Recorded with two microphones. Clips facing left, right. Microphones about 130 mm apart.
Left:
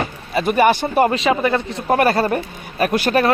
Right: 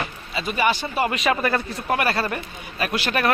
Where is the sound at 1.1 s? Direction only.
30° left (ahead or behind).